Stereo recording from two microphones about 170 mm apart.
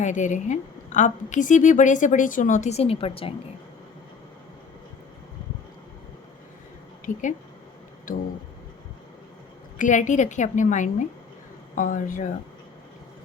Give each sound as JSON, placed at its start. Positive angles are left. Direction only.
{"t": 0.0, "sound": "a woman's voice", "side_deg": 45}
{"t": 7.0, "sound": "speech", "side_deg": 50}
{"t": 9.7, "sound": "a woman's voice", "side_deg": 50}